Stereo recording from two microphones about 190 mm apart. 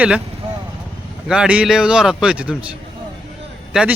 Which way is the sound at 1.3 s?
5° right (ahead or behind).